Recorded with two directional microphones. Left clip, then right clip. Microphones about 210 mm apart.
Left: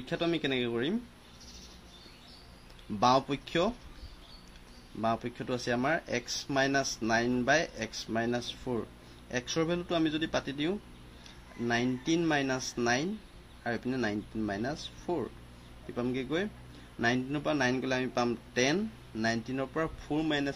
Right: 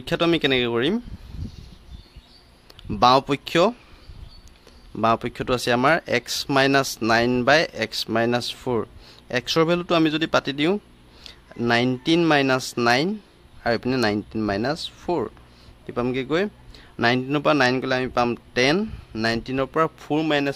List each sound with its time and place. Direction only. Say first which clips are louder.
0.0 s speech: right 11 dB; 45° right (ahead or behind)
3.0 s speech: right 9 dB; 40° right (ahead or behind)
5.0 s a man's voice: right 11 dB; 45° right (ahead or behind)